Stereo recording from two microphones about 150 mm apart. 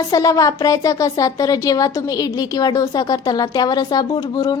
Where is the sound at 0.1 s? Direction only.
25° left (ahead or behind).